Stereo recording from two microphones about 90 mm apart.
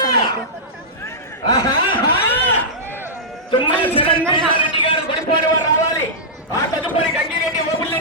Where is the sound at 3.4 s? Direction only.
75° left (ahead or behind).